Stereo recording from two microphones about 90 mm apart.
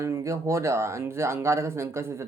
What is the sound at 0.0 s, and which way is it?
Speech, 30° right (ahead or behind).